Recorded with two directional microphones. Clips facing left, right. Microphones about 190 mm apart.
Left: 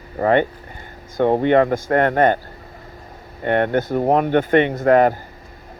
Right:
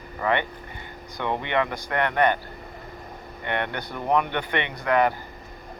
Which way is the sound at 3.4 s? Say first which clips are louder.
Left 11 dB; 45° left (ahead or behind).